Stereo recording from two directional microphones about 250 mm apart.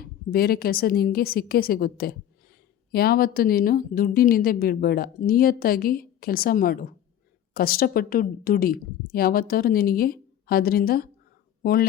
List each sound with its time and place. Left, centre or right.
0.3 s speech: left